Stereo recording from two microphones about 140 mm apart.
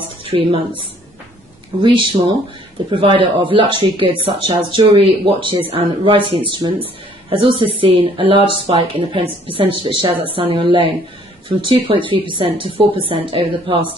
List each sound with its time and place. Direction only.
0.2 s a woman's voice: 40° right (ahead or behind)